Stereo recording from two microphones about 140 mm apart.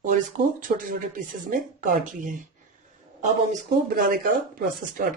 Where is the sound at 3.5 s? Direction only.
90° right.